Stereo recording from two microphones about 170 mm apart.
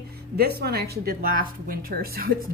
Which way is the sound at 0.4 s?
65° right (ahead or behind).